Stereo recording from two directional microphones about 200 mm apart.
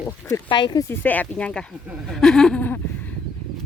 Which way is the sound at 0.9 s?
10° left (ahead or behind).